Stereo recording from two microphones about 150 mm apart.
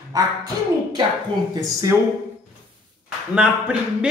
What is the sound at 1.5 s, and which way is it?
Speech, 20° right (ahead or behind).